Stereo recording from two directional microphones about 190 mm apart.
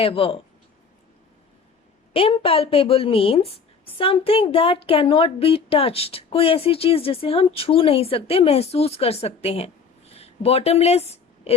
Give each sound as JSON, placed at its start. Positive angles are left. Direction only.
{"t": 0.0, "sound": "speech", "side_deg": 30}
{"t": 2.1, "sound": "a woman's voice", "side_deg": 30}